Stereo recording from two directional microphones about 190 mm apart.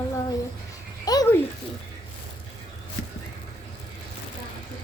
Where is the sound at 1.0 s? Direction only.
20° left (ahead or behind).